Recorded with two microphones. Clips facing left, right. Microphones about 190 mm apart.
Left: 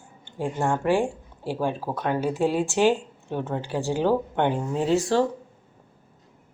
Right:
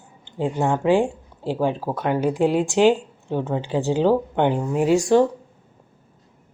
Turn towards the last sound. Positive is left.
turn(degrees=-15)  # may be behind; listen again after turning